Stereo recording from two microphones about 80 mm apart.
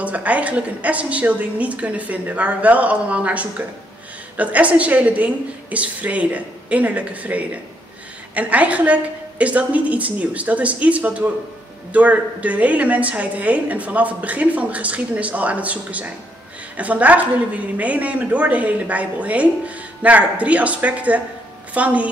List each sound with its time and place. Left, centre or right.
0.0 s a woman's voice: centre